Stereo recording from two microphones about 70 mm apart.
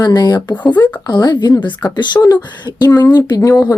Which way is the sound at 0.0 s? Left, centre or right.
Left.